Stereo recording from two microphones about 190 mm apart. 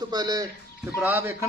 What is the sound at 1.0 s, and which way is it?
Speech, 10° right (ahead or behind).